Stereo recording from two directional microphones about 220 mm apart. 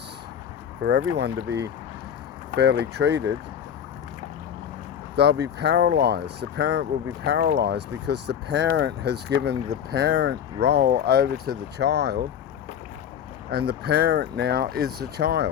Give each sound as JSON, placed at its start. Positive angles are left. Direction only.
{"t": 0.9, "sound": "speech", "side_deg": -55}
{"t": 5.1, "sound": "speech", "side_deg": -50}
{"t": 13.5, "sound": "speech", "side_deg": -45}